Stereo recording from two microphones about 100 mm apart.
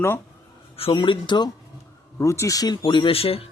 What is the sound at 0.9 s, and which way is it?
Speech, 50° left (ahead or behind).